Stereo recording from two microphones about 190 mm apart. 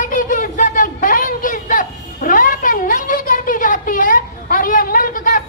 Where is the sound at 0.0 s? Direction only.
45° left (ahead or behind).